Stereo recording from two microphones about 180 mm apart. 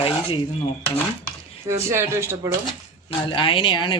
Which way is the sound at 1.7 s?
15° right (ahead or behind).